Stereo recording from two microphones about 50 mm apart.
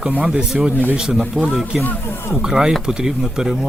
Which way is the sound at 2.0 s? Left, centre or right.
Left.